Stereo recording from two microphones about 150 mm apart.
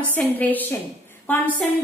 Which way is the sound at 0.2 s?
10° left (ahead or behind).